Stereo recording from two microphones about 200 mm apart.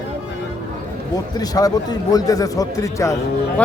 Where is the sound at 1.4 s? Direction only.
20° left (ahead or behind).